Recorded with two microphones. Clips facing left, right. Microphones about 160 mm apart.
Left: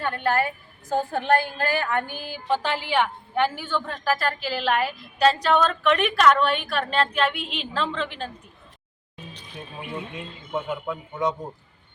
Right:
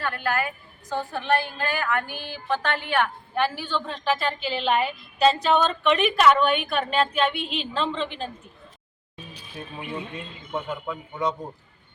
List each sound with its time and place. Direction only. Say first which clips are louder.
0.0 s a woman's voice: left 3 dB; 25° left (ahead or behind)
0.9 s a woman's voice: left 3 dB; 45° left (ahead or behind)
1.9 s music: left 1 dB; 20° left (ahead or behind)
3.7 s a woman's voice: even; 5° left (ahead or behind)
9.3 s a woman's voice: right 2 dB; centre (ahead or behind)